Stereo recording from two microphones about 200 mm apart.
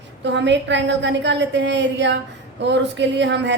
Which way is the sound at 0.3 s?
60° right (ahead or behind).